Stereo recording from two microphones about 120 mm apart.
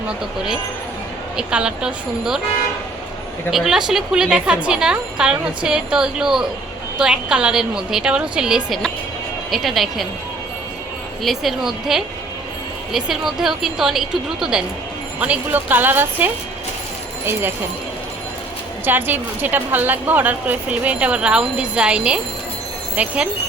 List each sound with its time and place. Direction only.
1.4 s a woman's voice: 5° right (ahead or behind)
3.5 s a woman's voice: 5° right (ahead or behind)
11.2 s a woman's voice: centre (ahead or behind)
18.9 s a woman's voice: 15° right (ahead or behind)